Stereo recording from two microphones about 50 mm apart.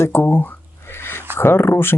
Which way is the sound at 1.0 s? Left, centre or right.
Left.